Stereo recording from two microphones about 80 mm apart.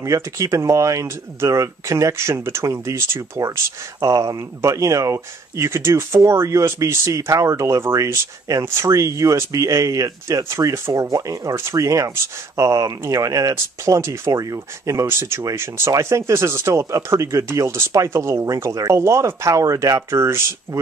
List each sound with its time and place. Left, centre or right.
0.0 s speech: right